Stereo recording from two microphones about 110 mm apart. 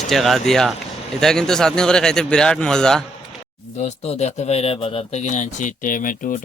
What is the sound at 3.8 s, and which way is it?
Speech, 90° left.